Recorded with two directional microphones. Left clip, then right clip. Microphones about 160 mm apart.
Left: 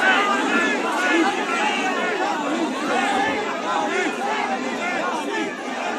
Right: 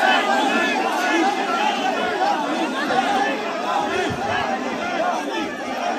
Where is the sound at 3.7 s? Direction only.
70° right (ahead or behind).